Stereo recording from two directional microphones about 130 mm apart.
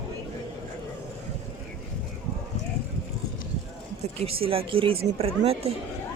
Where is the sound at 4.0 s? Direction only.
50° right (ahead or behind).